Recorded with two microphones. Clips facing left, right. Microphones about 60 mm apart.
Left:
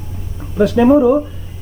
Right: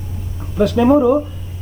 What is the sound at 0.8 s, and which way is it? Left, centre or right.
Speech, centre.